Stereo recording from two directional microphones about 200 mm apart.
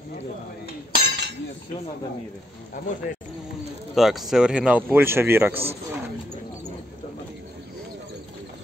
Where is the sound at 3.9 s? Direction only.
Centre (ahead or behind).